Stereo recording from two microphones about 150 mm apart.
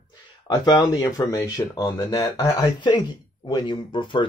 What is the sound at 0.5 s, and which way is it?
Speech, 30° left (ahead or behind).